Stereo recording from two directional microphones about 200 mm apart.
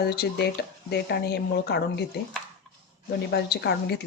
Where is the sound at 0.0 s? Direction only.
50° left (ahead or behind).